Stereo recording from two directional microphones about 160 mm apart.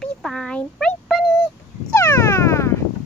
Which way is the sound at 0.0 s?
5° left (ahead or behind).